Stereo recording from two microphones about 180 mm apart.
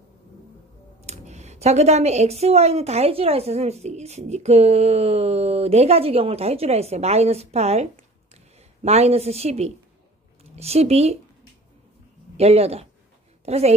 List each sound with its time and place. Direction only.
1.0 s speech: 40° right (ahead or behind)
12.4 s speech: 35° right (ahead or behind)